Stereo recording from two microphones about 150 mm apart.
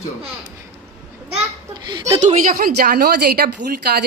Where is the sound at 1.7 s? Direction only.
30° right (ahead or behind).